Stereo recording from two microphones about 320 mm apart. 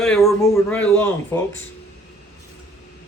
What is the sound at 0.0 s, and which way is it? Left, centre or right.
Speech, centre.